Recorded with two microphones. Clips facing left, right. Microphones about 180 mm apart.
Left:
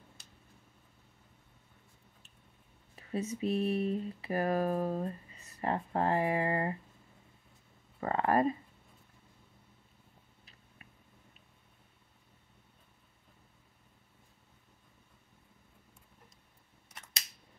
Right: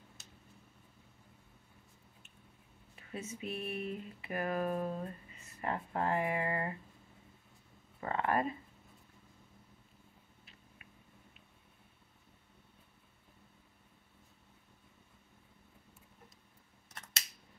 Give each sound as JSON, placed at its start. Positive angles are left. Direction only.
{"t": 3.0, "sound": "speech", "side_deg": 35}
{"t": 8.0, "sound": "speech", "side_deg": 35}